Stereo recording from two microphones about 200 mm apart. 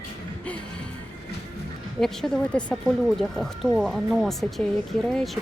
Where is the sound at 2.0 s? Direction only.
5° left (ahead or behind).